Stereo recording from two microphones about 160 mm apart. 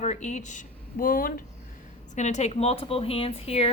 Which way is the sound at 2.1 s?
45° left (ahead or behind).